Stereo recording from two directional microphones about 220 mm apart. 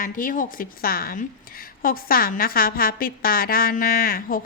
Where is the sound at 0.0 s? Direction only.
40° left (ahead or behind).